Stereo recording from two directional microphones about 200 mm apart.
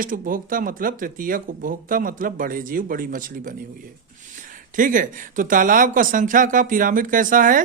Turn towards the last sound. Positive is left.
turn(degrees=-40)  # may be behind; listen again after turning